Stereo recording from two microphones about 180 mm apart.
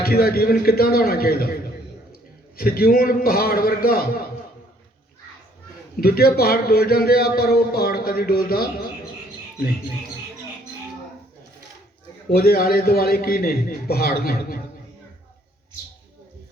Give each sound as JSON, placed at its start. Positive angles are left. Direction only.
{"t": 0.0, "sound": "a man's voice", "side_deg": 60}
{"t": 2.6, "sound": "a man's voice", "side_deg": 55}
{"t": 6.0, "sound": "a man's voice", "side_deg": 60}
{"t": 12.3, "sound": "a man's voice", "side_deg": 60}